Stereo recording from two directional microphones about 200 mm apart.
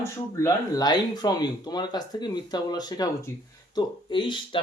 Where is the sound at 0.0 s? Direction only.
15° left (ahead or behind).